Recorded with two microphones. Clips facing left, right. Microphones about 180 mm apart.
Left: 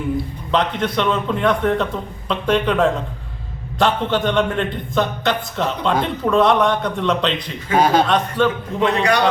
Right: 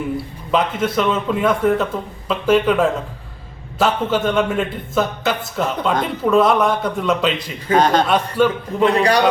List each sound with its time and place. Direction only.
0.5 s a man's voice: 5° right (ahead or behind)
7.7 s a man's voice: 5° left (ahead or behind)
8.0 s a man's voice: 5° right (ahead or behind)
8.8 s a man's voice: 35° right (ahead or behind)